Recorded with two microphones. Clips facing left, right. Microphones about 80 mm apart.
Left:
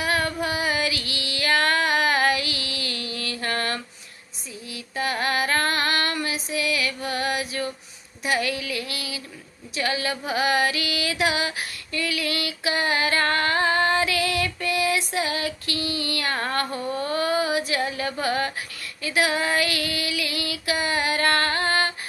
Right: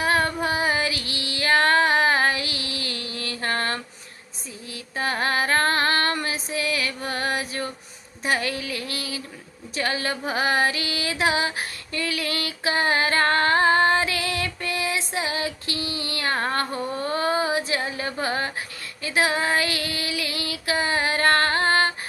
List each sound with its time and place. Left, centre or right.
0.0 s female singing: right
8.2 s a sound: right
9.7 s music: right